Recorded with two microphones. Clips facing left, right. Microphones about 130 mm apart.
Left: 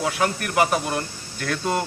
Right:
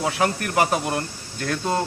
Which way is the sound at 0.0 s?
30° right (ahead or behind).